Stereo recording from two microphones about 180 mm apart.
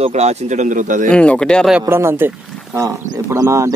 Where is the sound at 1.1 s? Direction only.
5° left (ahead or behind).